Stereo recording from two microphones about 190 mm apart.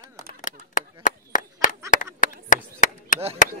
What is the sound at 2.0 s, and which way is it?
Chop, 40° left (ahead or behind).